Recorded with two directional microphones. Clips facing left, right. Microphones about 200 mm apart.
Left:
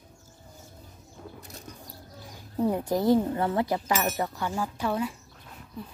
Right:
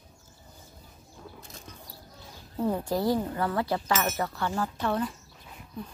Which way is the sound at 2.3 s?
15° left (ahead or behind).